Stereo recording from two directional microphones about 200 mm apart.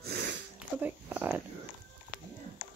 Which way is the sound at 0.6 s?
10° right (ahead or behind).